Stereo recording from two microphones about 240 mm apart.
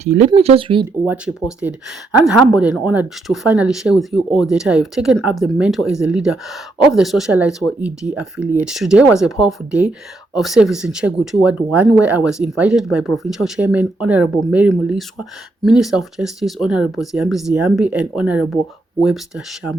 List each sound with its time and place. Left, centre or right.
0.0 s speech: right
1.0 s speech: centre